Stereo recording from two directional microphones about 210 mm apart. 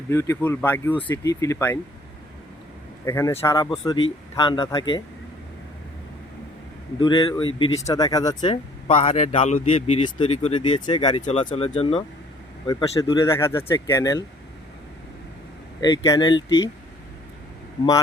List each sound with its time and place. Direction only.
0.1 s speech: 15° left (ahead or behind)
3.1 s speech: 15° left (ahead or behind)
7.0 s speech: 20° left (ahead or behind)
12.6 s speech: 15° left (ahead or behind)
15.8 s speech: 20° left (ahead or behind)